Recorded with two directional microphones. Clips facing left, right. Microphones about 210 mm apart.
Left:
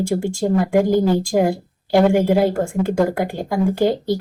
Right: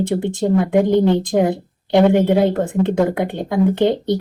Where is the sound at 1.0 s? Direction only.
20° right (ahead or behind).